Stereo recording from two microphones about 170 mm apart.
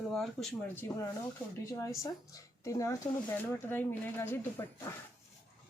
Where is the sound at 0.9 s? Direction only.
20° left (ahead or behind).